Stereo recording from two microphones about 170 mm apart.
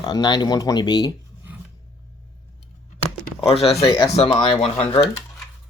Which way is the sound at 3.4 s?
35° left (ahead or behind).